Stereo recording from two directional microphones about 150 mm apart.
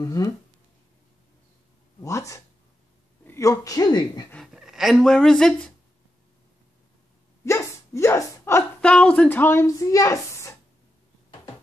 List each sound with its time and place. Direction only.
0.0 s speech: 25° left (ahead or behind)
2.0 s speech: 20° left (ahead or behind)
4.6 s speech: centre (ahead or behind)
7.4 s dog: 20° left (ahead or behind)
8.8 s speech: 5° left (ahead or behind)